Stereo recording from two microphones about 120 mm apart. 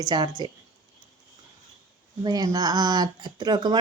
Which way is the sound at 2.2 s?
35° right (ahead or behind).